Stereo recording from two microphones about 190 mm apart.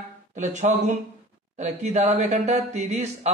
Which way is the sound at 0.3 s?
40° right (ahead or behind).